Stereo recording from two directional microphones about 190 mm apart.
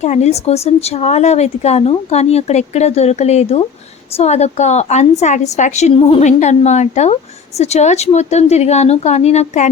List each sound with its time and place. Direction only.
0.0 s speech: 35° left (ahead or behind)